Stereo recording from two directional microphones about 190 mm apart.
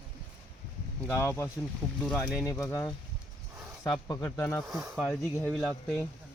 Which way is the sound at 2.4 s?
10° left (ahead or behind).